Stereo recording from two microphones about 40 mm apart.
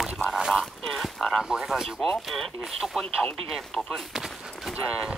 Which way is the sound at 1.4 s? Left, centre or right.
Centre.